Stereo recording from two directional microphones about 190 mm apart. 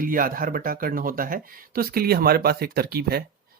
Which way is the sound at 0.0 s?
50° right (ahead or behind).